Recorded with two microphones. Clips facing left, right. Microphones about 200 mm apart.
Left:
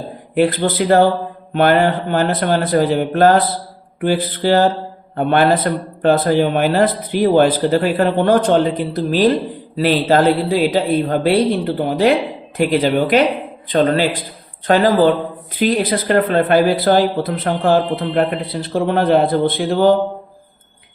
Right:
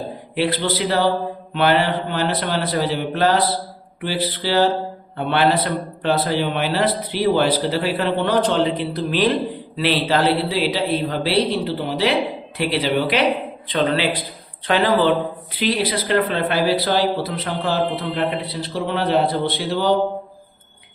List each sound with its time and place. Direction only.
0.3 s speech: 50° left (ahead or behind)